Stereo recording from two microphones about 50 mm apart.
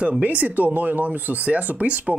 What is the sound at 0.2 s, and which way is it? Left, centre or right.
Speech, right.